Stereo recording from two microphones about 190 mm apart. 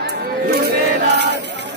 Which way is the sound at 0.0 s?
55° right (ahead or behind).